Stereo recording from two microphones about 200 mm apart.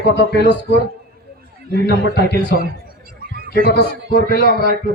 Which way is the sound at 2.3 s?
50° right (ahead or behind).